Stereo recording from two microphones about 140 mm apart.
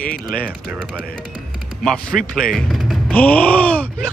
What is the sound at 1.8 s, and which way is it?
Speech, 5° left (ahead or behind).